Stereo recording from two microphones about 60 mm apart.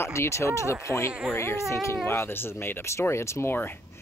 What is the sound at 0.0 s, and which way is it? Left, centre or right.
Speech, left.